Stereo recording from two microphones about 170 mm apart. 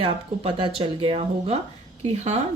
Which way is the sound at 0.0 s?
30° right (ahead or behind).